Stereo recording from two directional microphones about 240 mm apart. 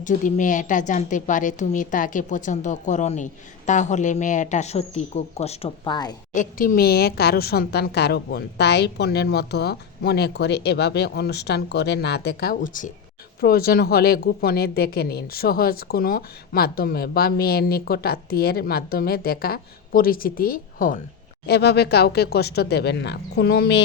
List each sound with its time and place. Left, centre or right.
0.0 s a woman's voice: left; by 6.1 s centre
6.3 s a woman's voice: left